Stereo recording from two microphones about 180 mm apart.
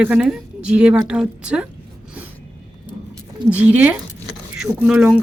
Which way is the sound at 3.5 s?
10° right (ahead or behind).